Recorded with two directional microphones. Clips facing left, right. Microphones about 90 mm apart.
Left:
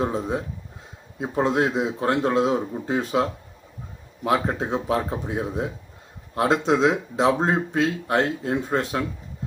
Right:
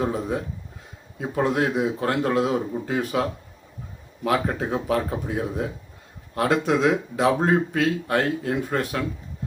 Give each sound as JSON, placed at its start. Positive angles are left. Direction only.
{"t": 0.0, "sound": "speech", "side_deg": 25}